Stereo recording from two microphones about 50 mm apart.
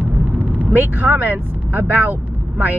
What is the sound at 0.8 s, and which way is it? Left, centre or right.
Speech, right.